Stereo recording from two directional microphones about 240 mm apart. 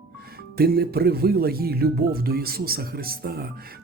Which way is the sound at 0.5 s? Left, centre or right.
Right.